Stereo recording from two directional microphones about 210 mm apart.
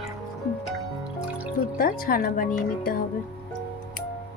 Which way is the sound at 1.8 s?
40° left (ahead or behind).